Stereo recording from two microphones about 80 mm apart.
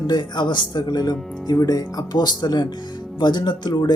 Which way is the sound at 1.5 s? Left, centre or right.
Left.